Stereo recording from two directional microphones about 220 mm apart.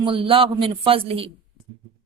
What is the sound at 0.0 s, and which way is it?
Speech, 25° right (ahead or behind).